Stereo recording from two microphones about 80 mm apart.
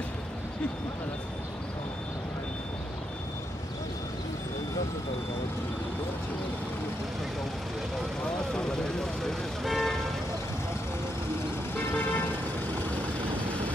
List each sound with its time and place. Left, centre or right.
8.5 s vehicle: centre
11.7 s vehicle: left